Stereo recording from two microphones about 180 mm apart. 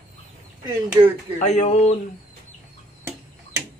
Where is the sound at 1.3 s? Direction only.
40° left (ahead or behind).